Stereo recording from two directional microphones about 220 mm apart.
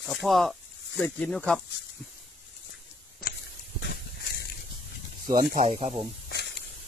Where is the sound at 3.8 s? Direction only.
50° left (ahead or behind).